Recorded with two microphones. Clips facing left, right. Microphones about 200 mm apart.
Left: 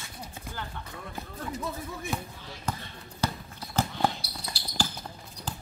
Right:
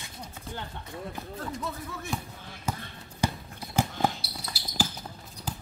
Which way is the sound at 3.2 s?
15° right (ahead or behind).